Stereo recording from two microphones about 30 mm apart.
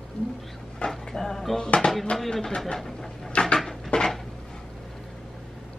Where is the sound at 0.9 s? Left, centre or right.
Centre.